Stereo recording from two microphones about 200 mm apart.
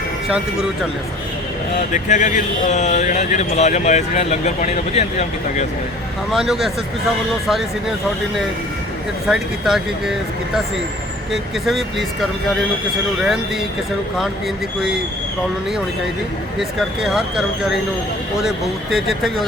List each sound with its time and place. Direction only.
1.9 s speech: 40° left (ahead or behind)
6.3 s speech: centre (ahead or behind)
9.2 s speech: centre (ahead or behind)
16.6 s speech: centre (ahead or behind)